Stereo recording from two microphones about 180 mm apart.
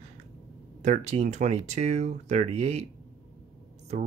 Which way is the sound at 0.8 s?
40° right (ahead or behind).